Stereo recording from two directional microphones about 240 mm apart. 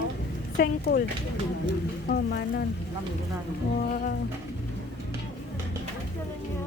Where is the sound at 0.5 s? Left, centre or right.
Left.